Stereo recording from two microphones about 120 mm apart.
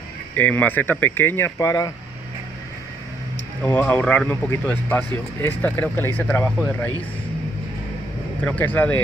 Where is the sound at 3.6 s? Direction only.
15° left (ahead or behind).